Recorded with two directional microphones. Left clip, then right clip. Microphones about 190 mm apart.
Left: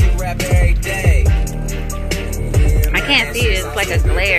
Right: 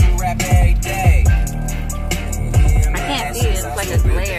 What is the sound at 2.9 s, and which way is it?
Speech, 5° left (ahead or behind).